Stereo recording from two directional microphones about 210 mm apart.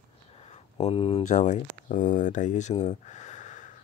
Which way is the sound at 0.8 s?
25° left (ahead or behind).